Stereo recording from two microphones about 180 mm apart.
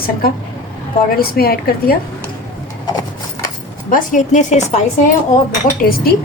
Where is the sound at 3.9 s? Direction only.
45° left (ahead or behind).